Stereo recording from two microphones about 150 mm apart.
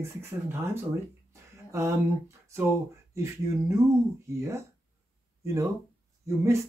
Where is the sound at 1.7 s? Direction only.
20° right (ahead or behind).